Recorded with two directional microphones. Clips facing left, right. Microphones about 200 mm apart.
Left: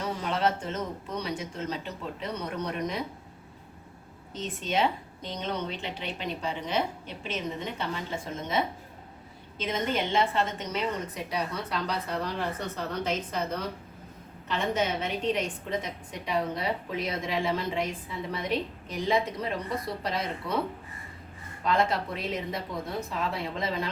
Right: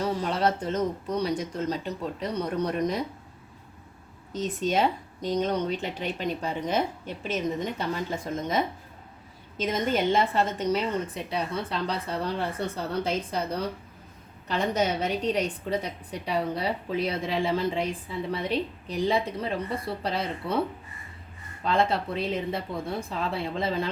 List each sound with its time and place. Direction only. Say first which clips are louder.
0.0 s a sound: right 3 dB; 35° right (ahead or behind)
1.2 s a woman's voice: right 6 dB; 40° right (ahead or behind)
4.3 s a woman's voice: right 5 dB; 40° right (ahead or behind)
21.6 s a woman's voice: right 1 dB; 30° right (ahead or behind)